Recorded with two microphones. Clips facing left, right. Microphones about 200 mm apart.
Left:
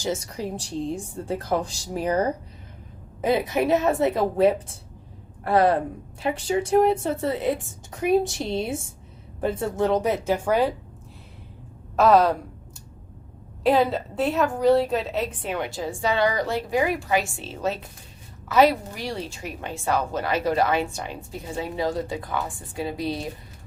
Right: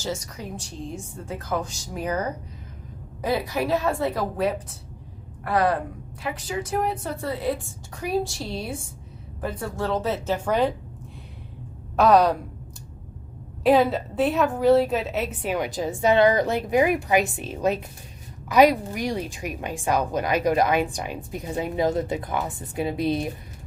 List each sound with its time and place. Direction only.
0.0 s a woman's voice: 25° left (ahead or behind); by 10.8 s 10° left (ahead or behind)
11.9 s a woman's voice: centre (ahead or behind)
13.7 s a woman's voice: centre (ahead or behind); by 23.3 s 20° right (ahead or behind)